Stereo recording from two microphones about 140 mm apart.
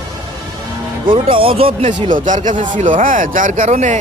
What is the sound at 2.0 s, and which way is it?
Speech, 65° right (ahead or behind).